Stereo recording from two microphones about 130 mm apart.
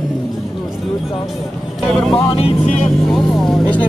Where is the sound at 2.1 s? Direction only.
45° left (ahead or behind).